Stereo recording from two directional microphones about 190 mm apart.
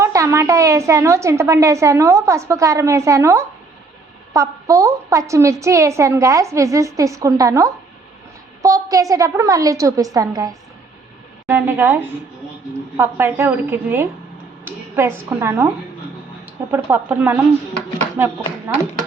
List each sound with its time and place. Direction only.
0.0 s a woman's voice: 15° right (ahead or behind)
16.7 s a woman's voice: 10° right (ahead or behind)